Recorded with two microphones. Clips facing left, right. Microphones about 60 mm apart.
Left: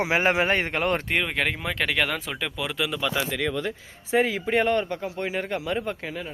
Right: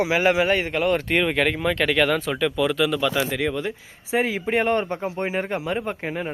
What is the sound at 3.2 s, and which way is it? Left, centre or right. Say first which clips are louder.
Speech: right 3 dB; centre.